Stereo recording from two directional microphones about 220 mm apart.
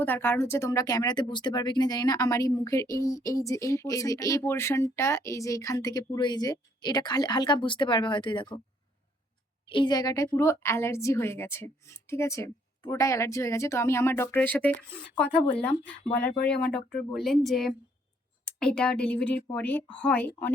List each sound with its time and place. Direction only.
0.0 s speech: 10° left (ahead or behind)
9.6 s speech: 20° left (ahead or behind)
16.7 s a woman's voice: centre (ahead or behind)